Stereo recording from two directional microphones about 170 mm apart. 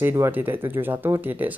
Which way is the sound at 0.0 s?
15° right (ahead or behind).